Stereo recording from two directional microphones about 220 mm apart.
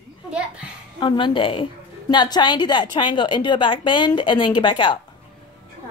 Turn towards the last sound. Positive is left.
turn(degrees=20)  # may be behind; listen again after turning